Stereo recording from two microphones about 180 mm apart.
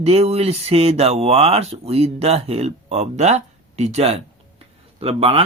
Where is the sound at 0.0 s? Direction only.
35° right (ahead or behind).